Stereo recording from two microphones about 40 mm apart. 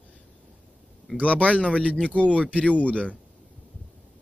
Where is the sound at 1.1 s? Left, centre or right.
Left.